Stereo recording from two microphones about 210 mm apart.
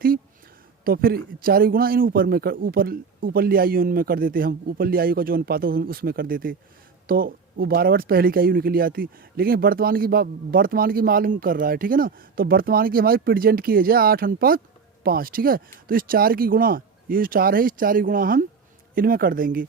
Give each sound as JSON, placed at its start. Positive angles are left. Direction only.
{"t": 0.9, "sound": "speech", "side_deg": -45}